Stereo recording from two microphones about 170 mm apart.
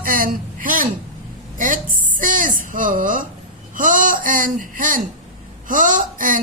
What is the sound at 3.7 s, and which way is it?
Speech, 50° right (ahead or behind).